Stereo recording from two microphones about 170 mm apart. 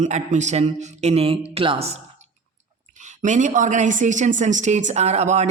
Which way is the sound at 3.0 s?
45° right (ahead or behind).